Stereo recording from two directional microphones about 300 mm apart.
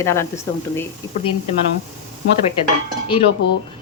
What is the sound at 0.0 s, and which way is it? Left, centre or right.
Speech, centre.